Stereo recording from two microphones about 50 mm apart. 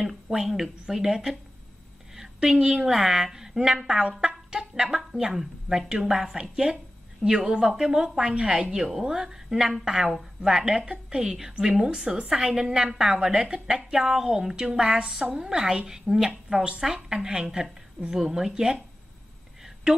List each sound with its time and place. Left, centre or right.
0.0 s a woman's voice: centre
19.6 s whispering: centre